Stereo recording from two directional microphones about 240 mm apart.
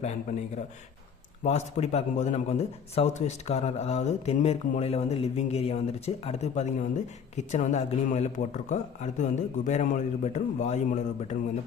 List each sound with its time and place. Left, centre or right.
0.0 s a man's voice: left